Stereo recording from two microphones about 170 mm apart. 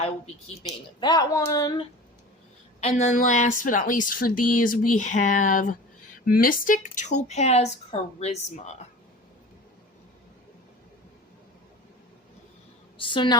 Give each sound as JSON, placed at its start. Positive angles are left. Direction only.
{"t": 0.9, "sound": "speech", "side_deg": 25}
{"t": 2.8, "sound": "a woman's voice", "side_deg": 45}
{"t": 13.0, "sound": "speech", "side_deg": 30}